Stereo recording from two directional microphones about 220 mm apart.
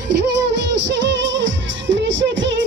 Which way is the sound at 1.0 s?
55° right (ahead or behind).